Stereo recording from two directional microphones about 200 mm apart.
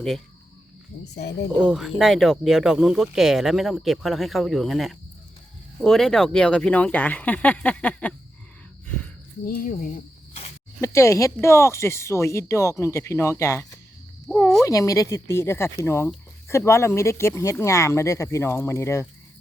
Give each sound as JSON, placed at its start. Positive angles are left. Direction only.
{"t": 1.1, "sound": "speech", "side_deg": 60}
{"t": 1.6, "sound": "speech", "side_deg": 0}
{"t": 9.5, "sound": "speech", "side_deg": 45}
{"t": 10.8, "sound": "speech", "side_deg": 15}
{"t": 14.3, "sound": "speech", "side_deg": 0}
{"t": 14.6, "sound": "speech", "side_deg": 15}